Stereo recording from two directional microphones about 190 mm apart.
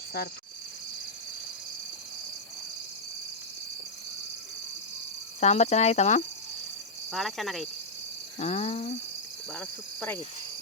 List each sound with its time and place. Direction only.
5.4 s speech: 35° left (ahead or behind)
7.1 s speech: centre (ahead or behind)
8.4 s speech: 35° left (ahead or behind)
9.5 s speech: 10° left (ahead or behind)